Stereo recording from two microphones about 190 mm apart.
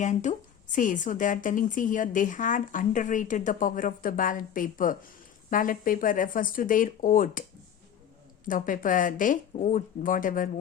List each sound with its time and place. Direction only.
0.0 s a woman's voice: 40° left (ahead or behind)
8.4 s a woman's voice: 45° left (ahead or behind)